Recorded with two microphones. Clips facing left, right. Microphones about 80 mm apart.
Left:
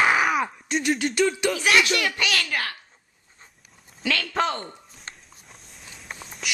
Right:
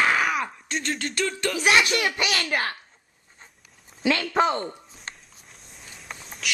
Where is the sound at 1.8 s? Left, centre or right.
Right.